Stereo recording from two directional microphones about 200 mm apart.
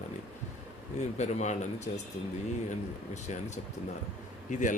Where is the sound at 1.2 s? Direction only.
35° left (ahead or behind).